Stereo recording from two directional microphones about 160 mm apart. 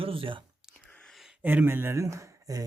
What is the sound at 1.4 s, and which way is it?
Speech, 10° right (ahead or behind).